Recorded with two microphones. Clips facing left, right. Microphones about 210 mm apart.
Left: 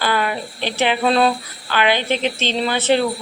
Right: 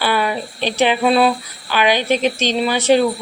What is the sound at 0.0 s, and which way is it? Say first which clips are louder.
Speech: right 2 dB; 15° right (ahead or behind).